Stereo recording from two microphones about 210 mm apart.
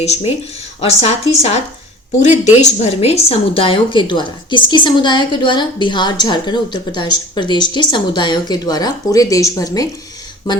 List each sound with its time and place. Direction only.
0.0 s a woman's voice: 30° left (ahead or behind)